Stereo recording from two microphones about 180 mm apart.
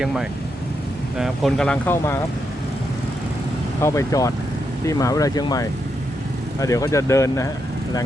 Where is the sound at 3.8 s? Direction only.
15° left (ahead or behind).